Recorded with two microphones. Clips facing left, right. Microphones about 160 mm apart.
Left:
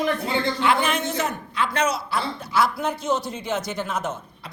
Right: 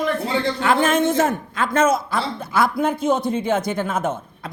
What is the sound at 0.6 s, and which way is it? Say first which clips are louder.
A man's voice: right 6 dB; 45° right (ahead or behind).